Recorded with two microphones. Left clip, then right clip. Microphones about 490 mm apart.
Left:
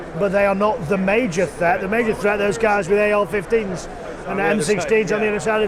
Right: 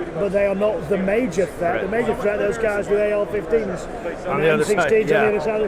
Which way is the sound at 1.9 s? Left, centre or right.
Left.